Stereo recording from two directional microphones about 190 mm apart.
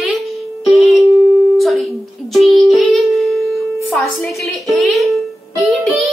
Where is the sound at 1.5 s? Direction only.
Centre (ahead or behind).